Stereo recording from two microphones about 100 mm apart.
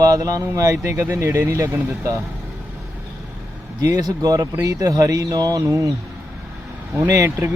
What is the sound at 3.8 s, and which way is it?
Speech, 35° right (ahead or behind).